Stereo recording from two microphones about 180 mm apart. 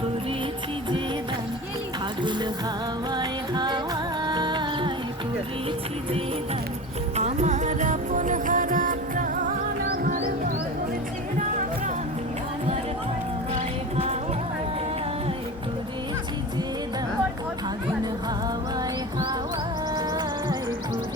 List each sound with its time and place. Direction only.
3.1 s music: 25° right (ahead or behind)
7.2 s music: 40° right (ahead or behind); by 10.2 s 55° right (ahead or behind)
13.5 s music: 35° right (ahead or behind)
19.9 s music: 20° right (ahead or behind)